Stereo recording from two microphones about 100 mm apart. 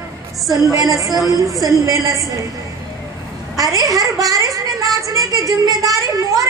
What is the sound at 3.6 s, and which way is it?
A child's voice, 35° right (ahead or behind).